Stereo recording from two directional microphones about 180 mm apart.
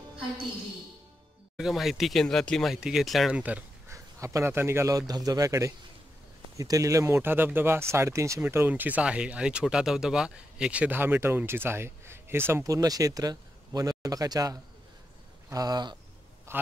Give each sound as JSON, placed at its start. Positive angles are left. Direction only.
{"t": 1.6, "sound": "speech", "side_deg": 0}